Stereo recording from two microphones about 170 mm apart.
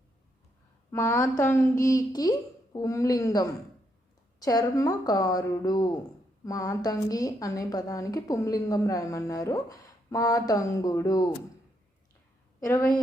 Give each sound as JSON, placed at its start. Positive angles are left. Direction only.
{"t": 0.9, "sound": "a woman's voice", "side_deg": 15}
{"t": 12.5, "sound": "a woman's voice", "side_deg": 15}